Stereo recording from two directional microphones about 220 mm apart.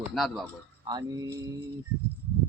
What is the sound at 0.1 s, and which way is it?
Speech, centre (ahead or behind).